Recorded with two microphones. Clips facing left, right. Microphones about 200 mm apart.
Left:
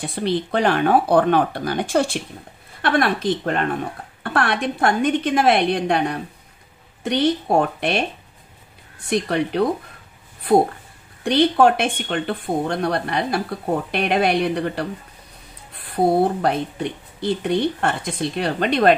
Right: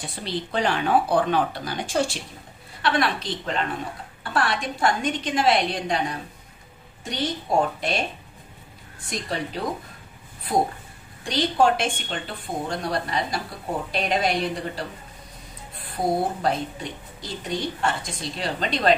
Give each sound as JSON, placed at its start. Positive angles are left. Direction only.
{"t": 0.2, "sound": "a woman's voice", "side_deg": 55}
{"t": 9.0, "sound": "a woman's voice", "side_deg": 65}
{"t": 11.2, "sound": "a woman's voice", "side_deg": 60}